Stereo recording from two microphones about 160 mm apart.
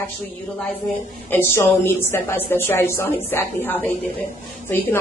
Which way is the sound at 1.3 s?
15° left (ahead or behind).